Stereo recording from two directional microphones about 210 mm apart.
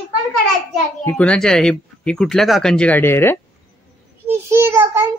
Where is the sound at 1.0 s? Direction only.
5° left (ahead or behind).